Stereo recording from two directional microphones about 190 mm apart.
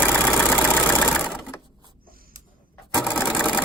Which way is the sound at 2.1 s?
50° right (ahead or behind).